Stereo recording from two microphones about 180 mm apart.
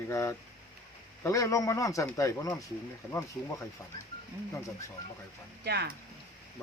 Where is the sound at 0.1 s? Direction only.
15° left (ahead or behind).